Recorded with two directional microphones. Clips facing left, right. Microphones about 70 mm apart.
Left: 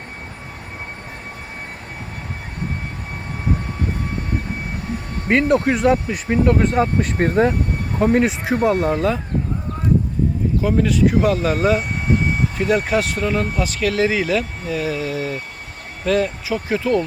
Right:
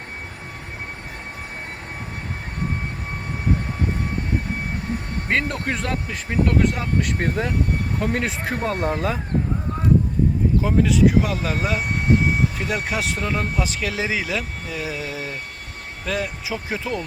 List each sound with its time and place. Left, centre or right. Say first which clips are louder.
5.3 s speech: left 8 dB; centre
6.6 s speech: left 4 dB; left
8.1 s speech: left 7 dB; centre
8.8 s speech: left 4 dB; centre
10.6 s speech: left 1 dB; centre
13.6 s speech: left 6 dB; centre